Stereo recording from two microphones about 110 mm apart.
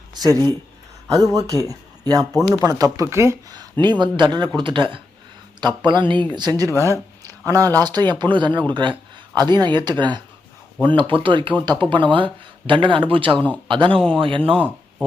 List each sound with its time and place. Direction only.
0.1 s speech: 35° right (ahead or behind)
3.5 s speech: 40° right (ahead or behind)
6.7 s speech: 25° left (ahead or behind)
7.2 s a sound: 30° right (ahead or behind)
7.8 s speech: 40° right (ahead or behind); by 14.6 s 55° right (ahead or behind)